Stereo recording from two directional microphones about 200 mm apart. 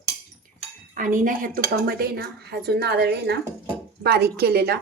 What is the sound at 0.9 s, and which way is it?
Speech, 40° right (ahead or behind).